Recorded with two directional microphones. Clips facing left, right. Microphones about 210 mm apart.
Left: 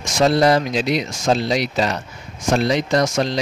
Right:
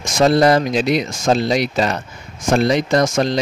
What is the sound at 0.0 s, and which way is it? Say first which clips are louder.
Speech: right 2 dB; 50° right (ahead or behind).